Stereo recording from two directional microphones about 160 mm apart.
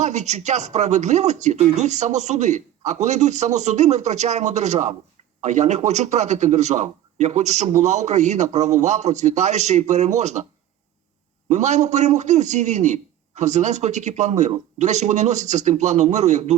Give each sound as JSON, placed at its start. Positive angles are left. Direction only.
{"t": 0.0, "sound": "a man's voice", "side_deg": -45}
{"t": 11.4, "sound": "a man's voice", "side_deg": -45}